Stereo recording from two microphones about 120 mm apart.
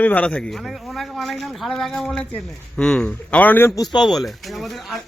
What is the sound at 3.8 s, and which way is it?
Speech, 35° left (ahead or behind).